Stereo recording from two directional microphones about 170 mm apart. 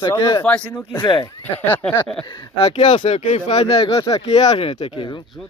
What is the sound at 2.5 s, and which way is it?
Speech, 35° left (ahead or behind).